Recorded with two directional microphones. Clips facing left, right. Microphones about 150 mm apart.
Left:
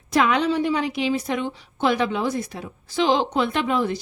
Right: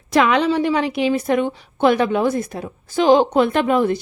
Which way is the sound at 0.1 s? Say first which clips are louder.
Right 4 dB; 80° right.